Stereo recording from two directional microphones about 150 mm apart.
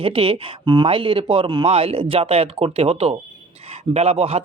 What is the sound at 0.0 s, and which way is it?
A man's voice, 40° right (ahead or behind).